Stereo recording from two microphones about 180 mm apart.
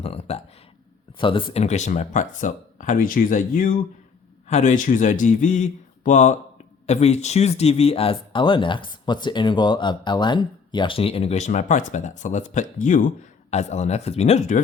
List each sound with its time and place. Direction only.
0.0 s a sound: 35° left (ahead or behind)
1.2 s speech: 30° left (ahead or behind)
1.6 s speech: 40° left (ahead or behind)